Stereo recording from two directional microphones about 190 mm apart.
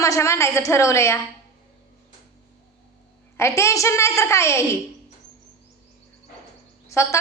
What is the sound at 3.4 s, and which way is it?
A woman's voice, 15° left (ahead or behind).